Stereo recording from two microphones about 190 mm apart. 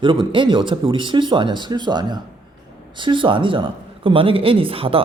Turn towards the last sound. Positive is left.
turn(degrees=-30)  # may be behind; listen again after turning